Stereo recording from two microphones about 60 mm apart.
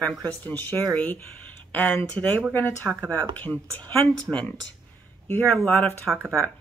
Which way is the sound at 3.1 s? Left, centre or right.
Left.